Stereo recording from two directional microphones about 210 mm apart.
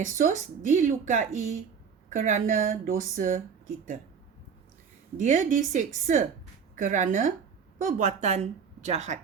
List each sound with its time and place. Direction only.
0.0 s a woman's voice: 40° right (ahead or behind)
5.1 s a woman's voice: 35° right (ahead or behind)